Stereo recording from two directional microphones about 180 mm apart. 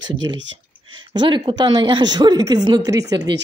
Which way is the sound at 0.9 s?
25° right (ahead or behind).